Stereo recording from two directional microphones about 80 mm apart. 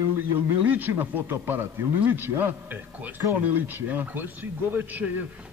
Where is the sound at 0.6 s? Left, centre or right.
Right.